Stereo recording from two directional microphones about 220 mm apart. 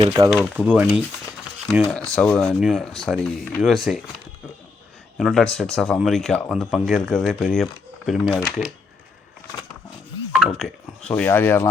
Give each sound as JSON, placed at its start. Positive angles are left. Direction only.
{"t": 0.0, "sound": "speech", "side_deg": -15}
{"t": 0.3, "sound": "speech", "side_deg": -5}
{"t": 5.1, "sound": "speech", "side_deg": 0}
{"t": 10.3, "sound": "speech", "side_deg": 0}